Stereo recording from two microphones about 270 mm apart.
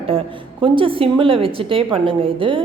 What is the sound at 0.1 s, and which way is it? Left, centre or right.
Speech, right.